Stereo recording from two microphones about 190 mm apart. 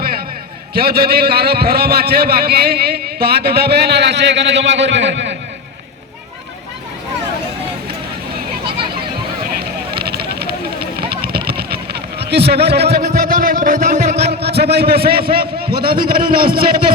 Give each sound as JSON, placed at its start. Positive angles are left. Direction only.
{"t": 0.7, "sound": "a man's voice", "side_deg": -55}
{"t": 9.6, "sound": "a sound", "side_deg": -55}
{"t": 11.1, "sound": "vehicle", "side_deg": -55}
{"t": 12.2, "sound": "a man's voice", "side_deg": -60}
{"t": 13.0, "sound": "a sound", "side_deg": -45}
{"t": 14.2, "sound": "a man's voice", "side_deg": -60}